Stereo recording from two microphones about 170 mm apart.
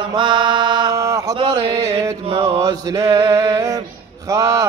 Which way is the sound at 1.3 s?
30° right (ahead or behind).